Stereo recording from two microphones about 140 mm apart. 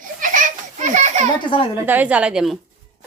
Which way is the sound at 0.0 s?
70° right (ahead or behind).